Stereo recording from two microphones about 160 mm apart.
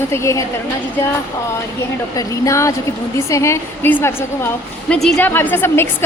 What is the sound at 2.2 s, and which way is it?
A woman's voice, 20° left (ahead or behind).